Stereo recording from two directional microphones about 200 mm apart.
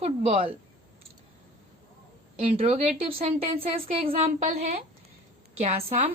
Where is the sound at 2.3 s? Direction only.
30° right (ahead or behind).